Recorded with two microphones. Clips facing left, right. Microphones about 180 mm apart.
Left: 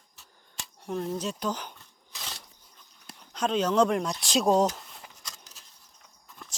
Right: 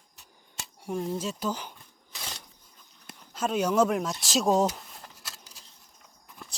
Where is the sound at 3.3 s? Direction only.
5° right (ahead or behind).